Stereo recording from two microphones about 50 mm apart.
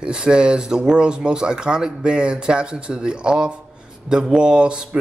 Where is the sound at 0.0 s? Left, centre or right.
Centre.